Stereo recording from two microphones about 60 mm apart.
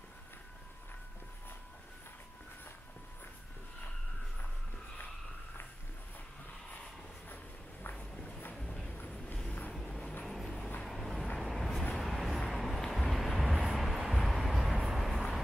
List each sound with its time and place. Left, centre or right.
7.9 s walk: centre
8.5 s a sound: centre
8.9 s vehicle: left
9.8 s vehicle: centre